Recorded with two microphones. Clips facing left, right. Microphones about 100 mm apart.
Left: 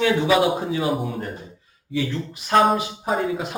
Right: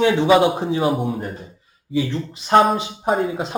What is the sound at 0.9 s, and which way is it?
Speech, centre (ahead or behind).